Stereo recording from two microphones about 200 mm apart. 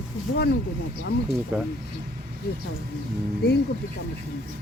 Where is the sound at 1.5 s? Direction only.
10° right (ahead or behind).